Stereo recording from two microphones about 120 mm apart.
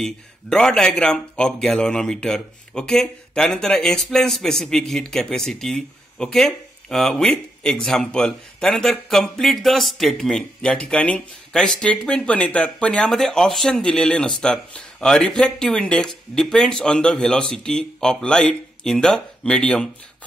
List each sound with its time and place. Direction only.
0.0 s speech: 5° left (ahead or behind)